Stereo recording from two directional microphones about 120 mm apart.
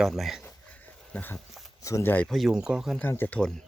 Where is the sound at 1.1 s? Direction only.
15° left (ahead or behind).